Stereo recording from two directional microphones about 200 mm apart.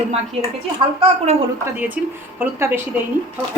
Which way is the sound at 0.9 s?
35° right (ahead or behind).